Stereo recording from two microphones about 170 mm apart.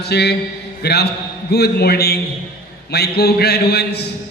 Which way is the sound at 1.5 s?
70° left (ahead or behind).